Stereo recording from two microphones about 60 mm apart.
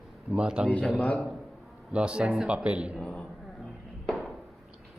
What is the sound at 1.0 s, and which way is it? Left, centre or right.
Speech, left.